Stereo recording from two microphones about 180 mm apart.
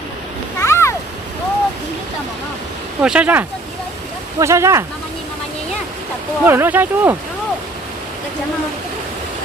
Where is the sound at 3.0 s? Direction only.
5° right (ahead or behind).